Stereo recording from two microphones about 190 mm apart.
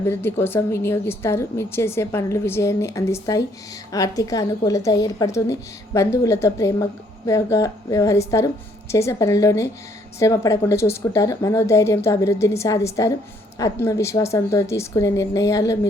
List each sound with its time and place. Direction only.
0.0 s a woman's voice: 10° left (ahead or behind)